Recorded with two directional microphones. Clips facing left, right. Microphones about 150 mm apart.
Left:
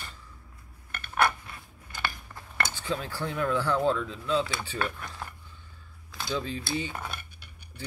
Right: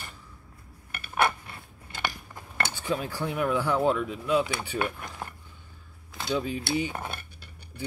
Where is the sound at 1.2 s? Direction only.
25° right (ahead or behind).